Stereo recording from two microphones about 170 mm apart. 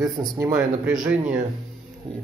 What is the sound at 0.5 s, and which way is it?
Speech, 5° right (ahead or behind).